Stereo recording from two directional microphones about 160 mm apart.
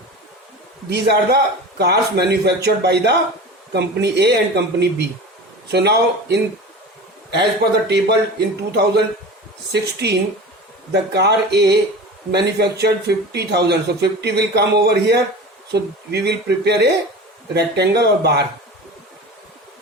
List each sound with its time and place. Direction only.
0.9 s speech: 90° right